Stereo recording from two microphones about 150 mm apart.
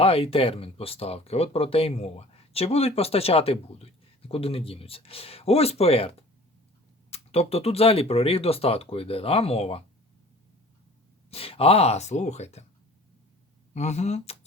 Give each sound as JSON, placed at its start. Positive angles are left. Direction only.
{"t": 0.0, "sound": "speech", "side_deg": 40}
{"t": 11.3, "sound": "speech", "side_deg": 40}
{"t": 13.7, "sound": "speech", "side_deg": 50}